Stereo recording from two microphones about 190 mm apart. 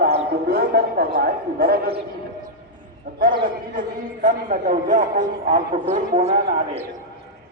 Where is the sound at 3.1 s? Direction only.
55° right (ahead or behind); by 6.3 s 35° right (ahead or behind).